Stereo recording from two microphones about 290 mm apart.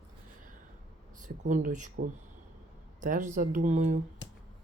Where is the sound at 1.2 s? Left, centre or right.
Right.